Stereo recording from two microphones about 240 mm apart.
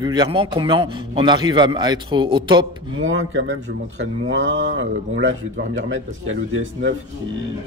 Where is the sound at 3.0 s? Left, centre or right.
Right.